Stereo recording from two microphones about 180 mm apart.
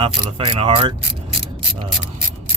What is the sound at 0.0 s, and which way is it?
Mechanisms, 30° right (ahead or behind).